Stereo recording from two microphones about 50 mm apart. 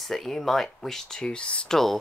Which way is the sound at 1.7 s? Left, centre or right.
Centre.